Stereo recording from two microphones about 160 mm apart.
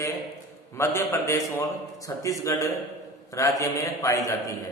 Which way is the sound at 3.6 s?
20° left (ahead or behind).